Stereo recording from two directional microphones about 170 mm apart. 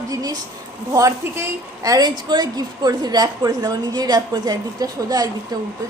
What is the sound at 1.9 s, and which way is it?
A woman's voice, 25° right (ahead or behind).